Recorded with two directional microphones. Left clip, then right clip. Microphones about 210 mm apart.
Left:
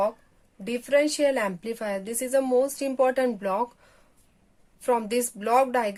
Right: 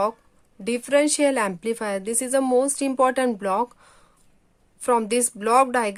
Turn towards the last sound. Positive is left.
turn(degrees=-30)  # may be behind; listen again after turning